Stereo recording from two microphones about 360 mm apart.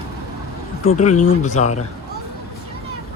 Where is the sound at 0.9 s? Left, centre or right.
Centre.